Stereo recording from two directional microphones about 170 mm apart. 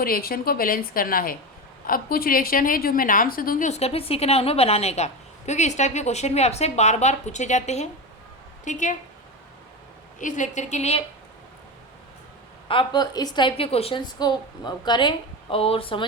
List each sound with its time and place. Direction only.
0.0 s a woman's voice: 60° left (ahead or behind)
3.7 s a woman's voice: 40° left (ahead or behind)
10.2 s a woman's voice: 50° left (ahead or behind)
12.6 s a woman's voice: 30° left (ahead or behind)